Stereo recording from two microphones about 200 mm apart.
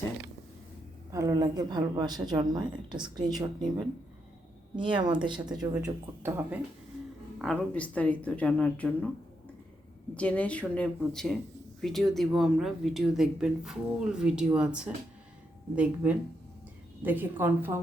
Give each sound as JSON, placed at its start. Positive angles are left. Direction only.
{"t": 1.1, "sound": "a woman's voice", "side_deg": -15}
{"t": 4.8, "sound": "a woman's voice", "side_deg": -25}
{"t": 5.8, "sound": "speech", "side_deg": -10}
{"t": 7.3, "sound": "speech", "side_deg": 5}
{"t": 10.2, "sound": "speech", "side_deg": 5}